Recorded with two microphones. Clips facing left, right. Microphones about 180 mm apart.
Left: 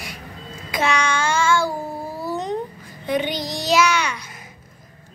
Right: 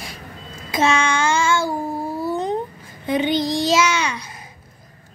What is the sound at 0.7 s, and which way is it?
Child singing, 25° right (ahead or behind).